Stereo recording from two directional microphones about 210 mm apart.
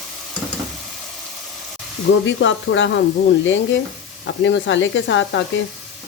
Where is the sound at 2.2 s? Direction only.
60° left (ahead or behind).